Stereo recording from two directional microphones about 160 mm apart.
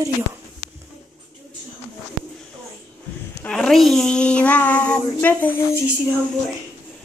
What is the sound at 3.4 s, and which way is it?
Child singing, 5° left (ahead or behind).